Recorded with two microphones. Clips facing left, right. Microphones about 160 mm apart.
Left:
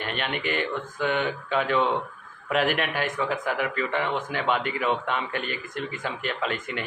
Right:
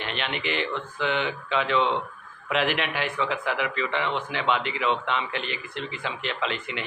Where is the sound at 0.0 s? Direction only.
45° left (ahead or behind).